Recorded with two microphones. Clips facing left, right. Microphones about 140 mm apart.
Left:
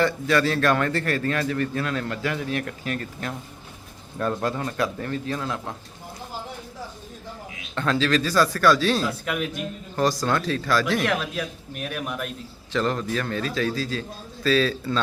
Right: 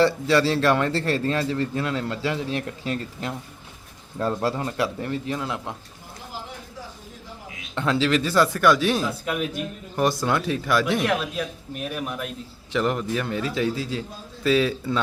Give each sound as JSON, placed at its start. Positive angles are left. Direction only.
{"t": 0.0, "sound": "a man's voice", "side_deg": -25}
{"t": 7.8, "sound": "a man's voice", "side_deg": -20}
{"t": 9.0, "sound": "speech", "side_deg": 0}
{"t": 9.9, "sound": "a man's voice", "side_deg": -20}
{"t": 11.0, "sound": "speech", "side_deg": 0}
{"t": 12.7, "sound": "a man's voice", "side_deg": -15}